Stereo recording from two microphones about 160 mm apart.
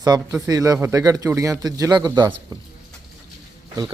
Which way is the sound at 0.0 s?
25° right (ahead or behind).